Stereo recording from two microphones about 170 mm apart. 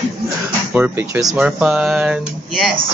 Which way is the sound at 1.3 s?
5° right (ahead or behind).